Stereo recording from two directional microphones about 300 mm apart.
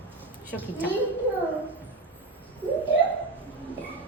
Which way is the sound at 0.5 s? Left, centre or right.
Centre.